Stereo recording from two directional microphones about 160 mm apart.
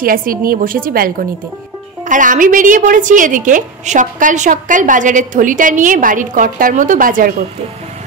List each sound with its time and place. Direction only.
0.0 s a woman's voice: 65° right (ahead or behind)